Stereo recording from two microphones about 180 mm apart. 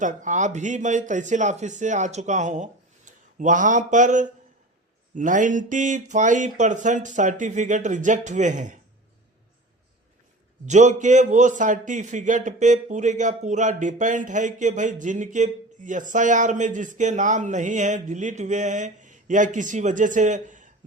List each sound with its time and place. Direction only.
0.0 s a man's voice: 45° right (ahead or behind)
10.7 s a man's voice: 40° right (ahead or behind)